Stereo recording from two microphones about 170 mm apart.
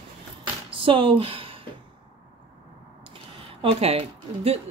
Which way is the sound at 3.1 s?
35° right (ahead or behind).